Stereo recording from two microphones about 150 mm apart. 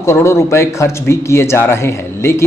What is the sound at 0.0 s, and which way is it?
A man's voice, 20° left (ahead or behind).